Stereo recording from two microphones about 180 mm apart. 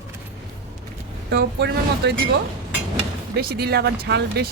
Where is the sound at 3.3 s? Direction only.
60° right (ahead or behind).